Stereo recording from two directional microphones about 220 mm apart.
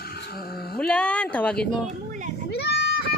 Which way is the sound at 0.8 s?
5° left (ahead or behind).